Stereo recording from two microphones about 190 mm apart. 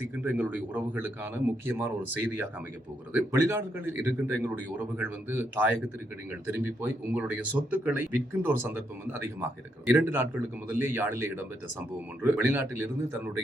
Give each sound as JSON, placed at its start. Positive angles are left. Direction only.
{"t": 0.2, "sound": "speech", "side_deg": -10}
{"t": 3.1, "sound": "speech", "side_deg": -10}